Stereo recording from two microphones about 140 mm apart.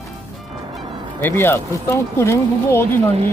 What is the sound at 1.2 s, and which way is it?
Speech, 15° left (ahead or behind).